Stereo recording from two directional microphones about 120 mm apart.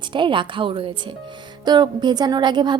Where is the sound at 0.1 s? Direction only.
45° right (ahead or behind).